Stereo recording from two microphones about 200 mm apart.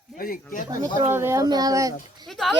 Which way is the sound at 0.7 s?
15° right (ahead or behind).